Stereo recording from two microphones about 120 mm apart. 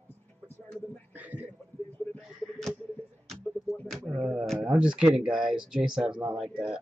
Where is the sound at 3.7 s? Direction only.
5° left (ahead or behind).